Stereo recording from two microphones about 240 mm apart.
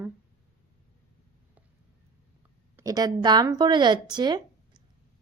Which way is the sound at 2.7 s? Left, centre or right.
Centre.